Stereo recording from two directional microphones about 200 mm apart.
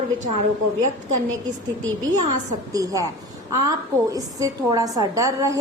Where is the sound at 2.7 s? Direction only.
15° right (ahead or behind).